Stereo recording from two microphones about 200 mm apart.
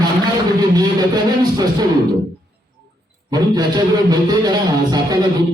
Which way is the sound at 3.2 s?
20° right (ahead or behind).